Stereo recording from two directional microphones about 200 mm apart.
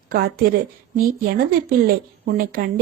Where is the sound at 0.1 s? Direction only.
50° right (ahead or behind).